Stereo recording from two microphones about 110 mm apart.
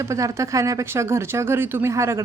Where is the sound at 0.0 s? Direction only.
30° right (ahead or behind).